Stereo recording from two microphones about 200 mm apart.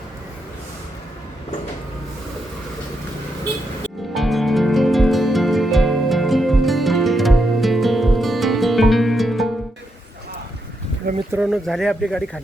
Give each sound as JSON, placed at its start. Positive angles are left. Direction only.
{"t": 4.1, "sound": "music", "side_deg": 0}
{"t": 11.3, "sound": "speech", "side_deg": -5}